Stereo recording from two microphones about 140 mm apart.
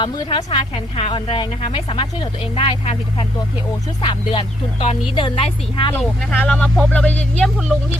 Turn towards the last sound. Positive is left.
turn(degrees=5)  # may be behind; listen again after turning